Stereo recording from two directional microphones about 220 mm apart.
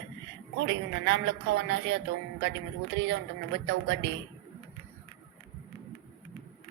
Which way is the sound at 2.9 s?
55° right (ahead or behind).